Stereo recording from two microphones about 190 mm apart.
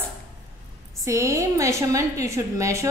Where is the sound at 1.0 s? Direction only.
15° right (ahead or behind).